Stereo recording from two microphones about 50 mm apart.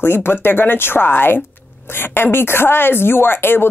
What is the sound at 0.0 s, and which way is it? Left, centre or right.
A woman's voice, left.